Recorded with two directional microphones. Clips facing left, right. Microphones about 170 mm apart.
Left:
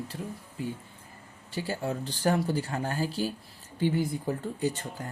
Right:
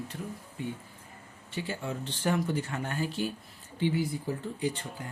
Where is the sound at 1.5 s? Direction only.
40° left (ahead or behind).